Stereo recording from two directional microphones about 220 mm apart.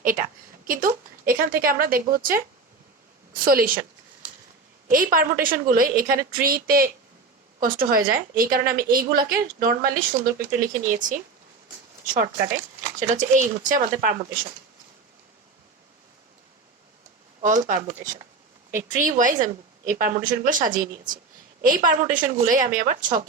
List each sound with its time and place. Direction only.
0.6 s a woman's voice: 40° right (ahead or behind)
4.9 s a woman's voice: 40° right (ahead or behind)
17.4 s a woman's voice: 35° right (ahead or behind)